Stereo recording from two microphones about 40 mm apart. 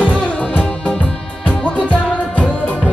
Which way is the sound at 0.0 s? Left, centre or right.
Left.